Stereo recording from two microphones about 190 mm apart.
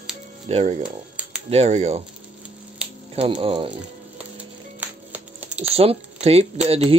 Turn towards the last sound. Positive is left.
turn(degrees=-30)  # may be behind; listen again after turning